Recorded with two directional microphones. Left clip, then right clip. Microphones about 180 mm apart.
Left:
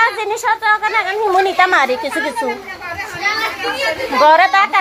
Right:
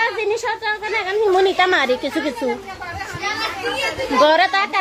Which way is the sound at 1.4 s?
30° right (ahead or behind).